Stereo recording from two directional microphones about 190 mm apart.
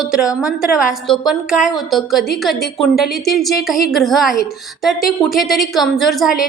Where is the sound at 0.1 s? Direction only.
5° right (ahead or behind).